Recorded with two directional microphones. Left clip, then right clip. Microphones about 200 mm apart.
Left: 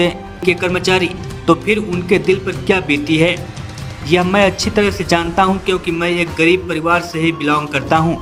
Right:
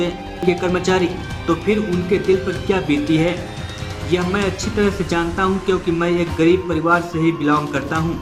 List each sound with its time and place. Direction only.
0.0 s speech: 35° left (ahead or behind)